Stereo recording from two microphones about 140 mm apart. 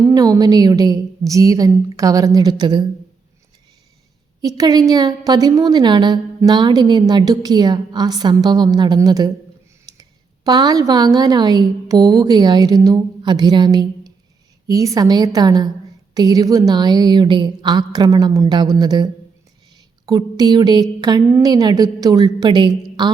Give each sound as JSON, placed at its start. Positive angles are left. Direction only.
{"t": 0.0, "sound": "a woman's voice", "side_deg": -25}
{"t": 4.4, "sound": "a woman's voice", "side_deg": -25}